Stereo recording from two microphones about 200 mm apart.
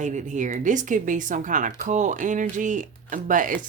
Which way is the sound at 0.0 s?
40° right (ahead or behind).